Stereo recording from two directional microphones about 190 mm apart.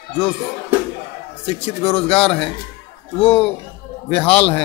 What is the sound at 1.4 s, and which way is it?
Speech, 30° left (ahead or behind).